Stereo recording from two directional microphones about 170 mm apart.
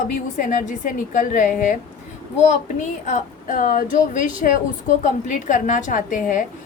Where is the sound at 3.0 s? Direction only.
45° left (ahead or behind).